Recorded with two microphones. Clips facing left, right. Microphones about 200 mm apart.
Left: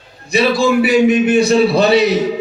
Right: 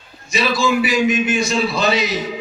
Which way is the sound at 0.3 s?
60° left (ahead or behind).